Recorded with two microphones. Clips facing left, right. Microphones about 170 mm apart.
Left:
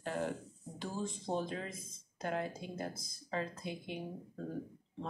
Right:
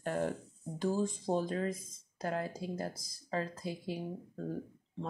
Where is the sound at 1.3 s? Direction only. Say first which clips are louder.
Right 4 dB; 40° right (ahead or behind).